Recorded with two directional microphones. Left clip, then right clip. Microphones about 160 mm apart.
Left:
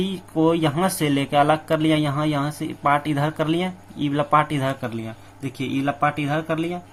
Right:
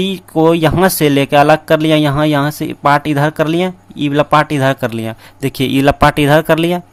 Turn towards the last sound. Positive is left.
turn(degrees=-55)  # may be behind; listen again after turning